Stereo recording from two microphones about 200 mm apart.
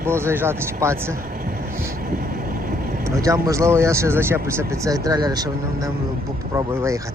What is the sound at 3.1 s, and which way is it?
Speech, 15° right (ahead or behind).